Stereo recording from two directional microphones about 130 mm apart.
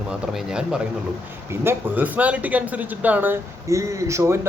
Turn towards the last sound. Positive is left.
turn(degrees=-25)  # may be behind; listen again after turning